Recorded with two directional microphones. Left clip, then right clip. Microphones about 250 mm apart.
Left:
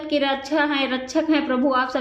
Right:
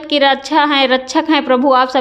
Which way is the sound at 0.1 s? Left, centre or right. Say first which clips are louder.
Right 10 dB; right.